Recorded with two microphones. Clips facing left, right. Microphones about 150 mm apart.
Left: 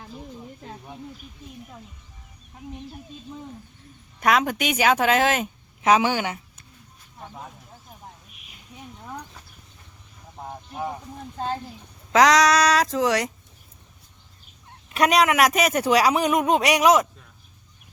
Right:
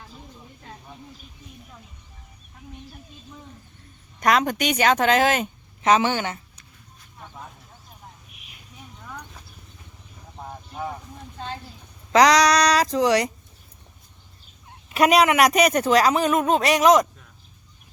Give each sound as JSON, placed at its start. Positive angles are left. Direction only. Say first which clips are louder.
{"t": 4.2, "sound": "a woman's voice", "louder": "right 1 dB", "side_deg": 5}
{"t": 10.5, "sound": "a sound", "louder": "left 1 dB", "side_deg": 15}
{"t": 12.1, "sound": "a woman's voice", "louder": "right 1 dB", "side_deg": 0}
{"t": 14.8, "sound": "speech", "louder": "right 2 dB", "side_deg": 0}